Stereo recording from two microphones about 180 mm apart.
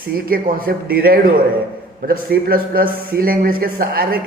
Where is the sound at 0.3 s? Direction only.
55° right (ahead or behind).